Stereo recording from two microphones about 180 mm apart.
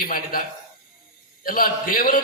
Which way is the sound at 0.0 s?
55° left (ahead or behind).